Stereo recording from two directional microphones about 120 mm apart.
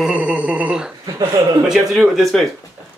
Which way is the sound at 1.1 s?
30° right (ahead or behind).